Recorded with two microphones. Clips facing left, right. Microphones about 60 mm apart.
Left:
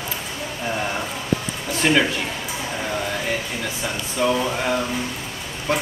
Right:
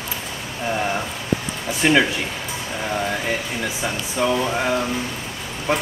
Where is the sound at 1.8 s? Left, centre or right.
Centre.